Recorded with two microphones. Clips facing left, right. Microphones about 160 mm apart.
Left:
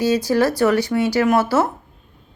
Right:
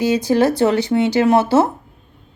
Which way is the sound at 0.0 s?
20° right (ahead or behind).